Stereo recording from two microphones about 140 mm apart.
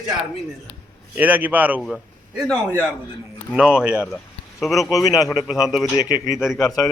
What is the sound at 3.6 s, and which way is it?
Speech, 5° right (ahead or behind).